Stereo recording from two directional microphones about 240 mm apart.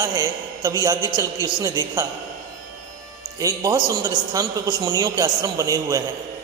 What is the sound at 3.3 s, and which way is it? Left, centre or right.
A man's voice, centre.